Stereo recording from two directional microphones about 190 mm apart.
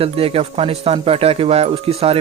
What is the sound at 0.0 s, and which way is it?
Speech, 30° right (ahead or behind).